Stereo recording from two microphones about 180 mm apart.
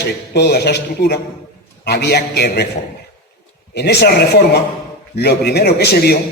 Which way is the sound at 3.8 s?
65° left (ahead or behind).